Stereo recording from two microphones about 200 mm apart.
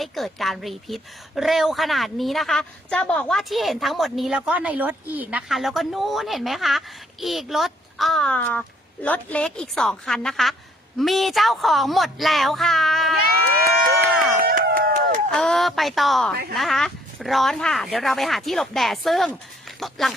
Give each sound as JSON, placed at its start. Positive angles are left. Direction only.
{"t": 0.0, "sound": "a woman's voice", "side_deg": 0}
{"t": 14.3, "sound": "a sound", "side_deg": -50}
{"t": 15.3, "sound": "a woman's voice", "side_deg": 5}